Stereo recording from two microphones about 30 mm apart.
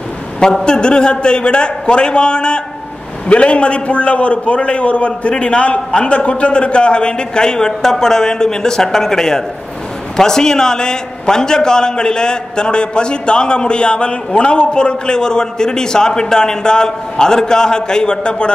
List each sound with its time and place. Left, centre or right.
0.7 s a man's voice: left
3.3 s a man's voice: left